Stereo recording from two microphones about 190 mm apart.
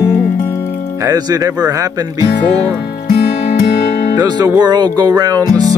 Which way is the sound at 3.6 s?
40° left (ahead or behind).